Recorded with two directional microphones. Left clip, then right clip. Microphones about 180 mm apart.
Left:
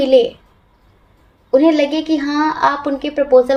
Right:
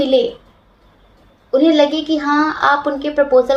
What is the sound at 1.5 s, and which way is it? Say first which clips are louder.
A woman's voice: even; 45° left (ahead or behind).